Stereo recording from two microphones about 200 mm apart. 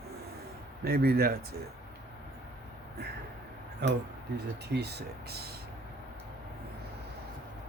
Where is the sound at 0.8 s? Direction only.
50° right (ahead or behind).